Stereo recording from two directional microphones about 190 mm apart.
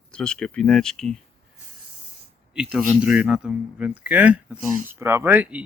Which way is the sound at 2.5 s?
5° right (ahead or behind).